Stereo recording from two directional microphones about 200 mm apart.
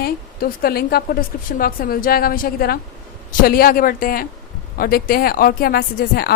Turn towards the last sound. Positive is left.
turn(degrees=50)  # may be behind; listen again after turning